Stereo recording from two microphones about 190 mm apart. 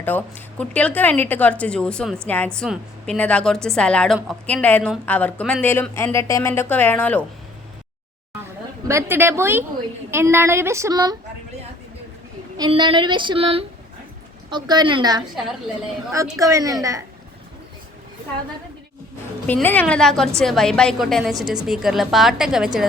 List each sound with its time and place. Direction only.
0.0 s a woman's voice: 10° left (ahead or behind)
8.9 s a woman's voice: 15° right (ahead or behind)
12.5 s a sound: 25° right (ahead or behind)
16.4 s a woman's voice: 15° right (ahead or behind)
19.5 s a woman's voice: 10° left (ahead or behind)